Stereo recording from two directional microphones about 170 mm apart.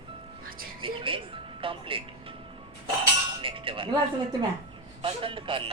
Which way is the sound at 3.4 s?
30° right (ahead or behind).